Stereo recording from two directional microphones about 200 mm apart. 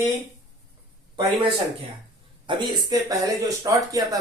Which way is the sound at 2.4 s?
20° right (ahead or behind).